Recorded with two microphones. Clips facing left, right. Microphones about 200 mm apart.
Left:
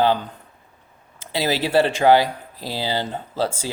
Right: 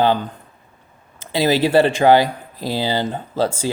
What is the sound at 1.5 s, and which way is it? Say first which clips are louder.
Speech: right 3 dB; 50° right (ahead or behind).